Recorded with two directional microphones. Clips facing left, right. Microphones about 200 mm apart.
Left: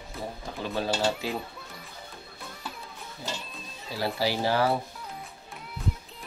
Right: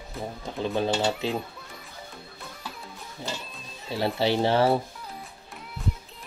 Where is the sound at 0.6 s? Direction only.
20° right (ahead or behind).